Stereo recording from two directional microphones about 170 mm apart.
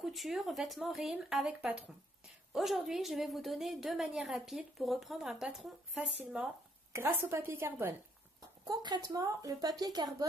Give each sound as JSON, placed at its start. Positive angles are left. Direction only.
{"t": 0.0, "sound": "a woman's voice", "side_deg": 0}
{"t": 8.6, "sound": "speech", "side_deg": -25}